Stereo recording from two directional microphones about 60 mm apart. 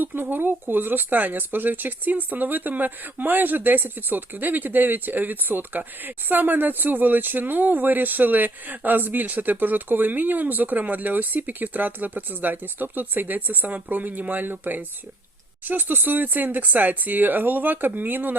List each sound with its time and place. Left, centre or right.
0.0 s speech: right